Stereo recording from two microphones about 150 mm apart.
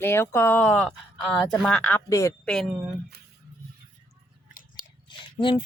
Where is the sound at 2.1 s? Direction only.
20° left (ahead or behind).